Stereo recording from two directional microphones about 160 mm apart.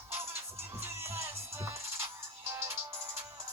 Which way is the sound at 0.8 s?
15° right (ahead or behind).